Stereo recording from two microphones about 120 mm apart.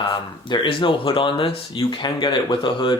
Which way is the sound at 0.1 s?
40° left (ahead or behind).